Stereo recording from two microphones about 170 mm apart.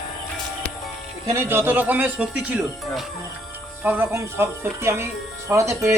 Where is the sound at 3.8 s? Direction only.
15° right (ahead or behind).